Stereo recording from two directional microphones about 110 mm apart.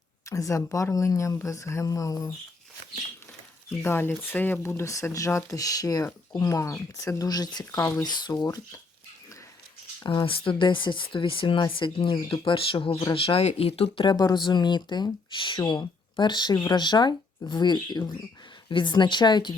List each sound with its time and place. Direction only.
0.3 s speech: 30° left (ahead or behind)
3.8 s speech: 20° left (ahead or behind)
8.0 s speech: 40° left (ahead or behind)
10.0 s speech: 45° left (ahead or behind)